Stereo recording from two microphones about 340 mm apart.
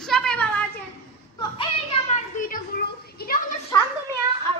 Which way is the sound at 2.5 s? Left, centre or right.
Left.